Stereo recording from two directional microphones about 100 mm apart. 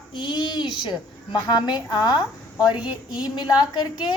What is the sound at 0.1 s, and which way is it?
A woman's voice, 50° left (ahead or behind).